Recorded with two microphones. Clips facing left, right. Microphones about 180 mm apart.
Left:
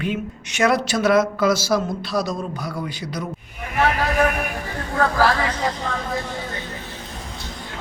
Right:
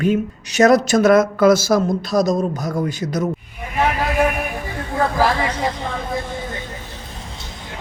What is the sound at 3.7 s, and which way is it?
Vehicle, 15° right (ahead or behind).